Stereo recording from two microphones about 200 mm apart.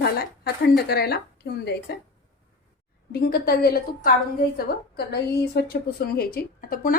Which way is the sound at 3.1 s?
50° left (ahead or behind).